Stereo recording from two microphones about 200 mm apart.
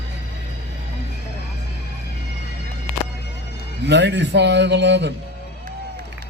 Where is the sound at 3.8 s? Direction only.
60° right (ahead or behind).